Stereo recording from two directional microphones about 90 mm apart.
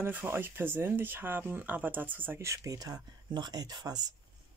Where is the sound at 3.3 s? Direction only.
50° right (ahead or behind).